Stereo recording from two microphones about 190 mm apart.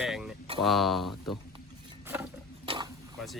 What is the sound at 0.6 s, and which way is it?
Speech, centre (ahead or behind).